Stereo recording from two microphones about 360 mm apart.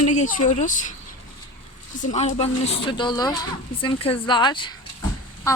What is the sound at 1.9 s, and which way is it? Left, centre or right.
Speech, centre.